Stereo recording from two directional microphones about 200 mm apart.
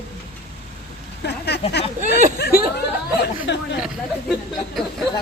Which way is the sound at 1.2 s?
55° left (ahead or behind).